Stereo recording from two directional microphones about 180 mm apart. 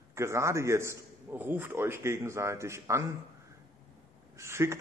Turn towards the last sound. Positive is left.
turn(degrees=-15)  # may be behind; listen again after turning